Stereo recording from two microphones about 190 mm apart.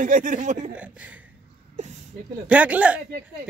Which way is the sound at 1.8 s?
35° right (ahead or behind).